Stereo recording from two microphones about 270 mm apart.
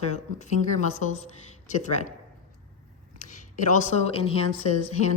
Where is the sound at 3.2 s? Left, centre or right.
Left.